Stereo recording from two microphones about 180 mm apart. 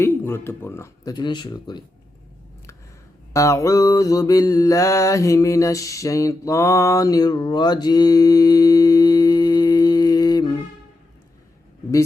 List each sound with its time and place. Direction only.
0.0 s speech: 15° left (ahead or behind)
3.3 s mantra: 15° left (ahead or behind)